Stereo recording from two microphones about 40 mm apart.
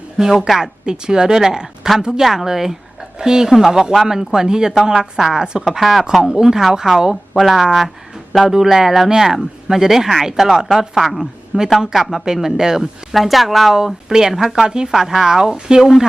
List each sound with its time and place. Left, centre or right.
0.2 s a woman's voice: centre
5.8 s a woman's voice: centre
6.1 s a woman's voice: centre
7.3 s a woman's voice: centre
11.8 s a woman's voice: centre
13.1 s a woman's voice: centre